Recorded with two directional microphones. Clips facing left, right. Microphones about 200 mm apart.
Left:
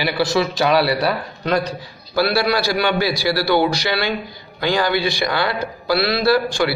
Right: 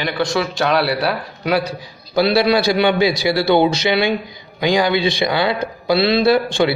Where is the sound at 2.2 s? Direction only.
20° right (ahead or behind).